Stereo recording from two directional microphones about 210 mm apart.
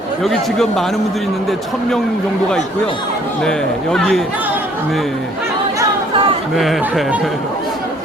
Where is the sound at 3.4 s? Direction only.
5° left (ahead or behind).